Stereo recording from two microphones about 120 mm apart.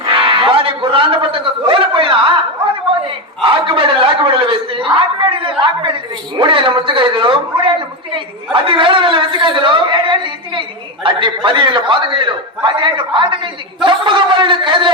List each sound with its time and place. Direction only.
0.0 s speech: 45° right (ahead or behind)
3.4 s a woman's voice: 45° right (ahead or behind)